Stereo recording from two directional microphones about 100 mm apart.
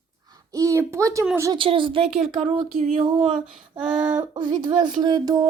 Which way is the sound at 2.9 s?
65° right (ahead or behind).